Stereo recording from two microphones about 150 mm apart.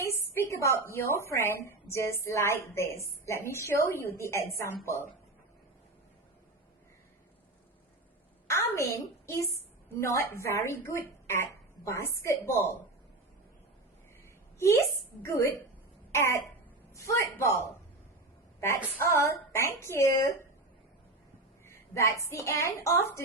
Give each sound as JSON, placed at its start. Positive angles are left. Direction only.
{"t": 0.2, "sound": "a woman's voice", "side_deg": 20}
{"t": 8.4, "sound": "a woman's voice", "side_deg": 20}
{"t": 14.6, "sound": "a woman's voice", "side_deg": 20}
{"t": 19.1, "sound": "a woman's voice", "side_deg": 20}
{"t": 21.7, "sound": "a woman's voice", "side_deg": 20}